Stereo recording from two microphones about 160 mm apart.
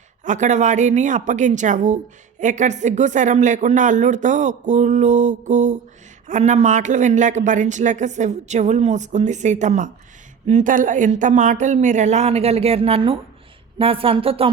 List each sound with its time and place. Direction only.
0.3 s a woman's voice: 50° right (ahead or behind)